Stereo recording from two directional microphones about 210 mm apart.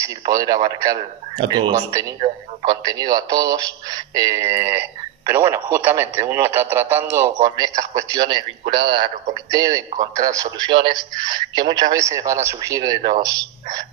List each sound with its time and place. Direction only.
0.0 s speech: 15° right (ahead or behind)